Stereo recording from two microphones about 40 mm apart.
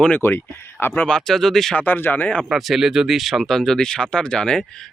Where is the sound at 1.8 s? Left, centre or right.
Left.